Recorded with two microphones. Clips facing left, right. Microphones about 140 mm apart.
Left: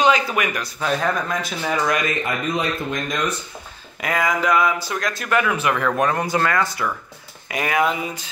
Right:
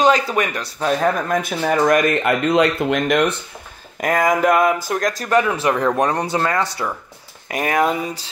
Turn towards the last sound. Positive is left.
turn(degrees=-40)  # may be behind; listen again after turning